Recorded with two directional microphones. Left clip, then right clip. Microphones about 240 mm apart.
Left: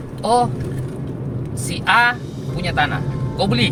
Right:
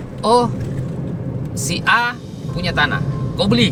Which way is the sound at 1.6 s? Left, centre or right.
Centre.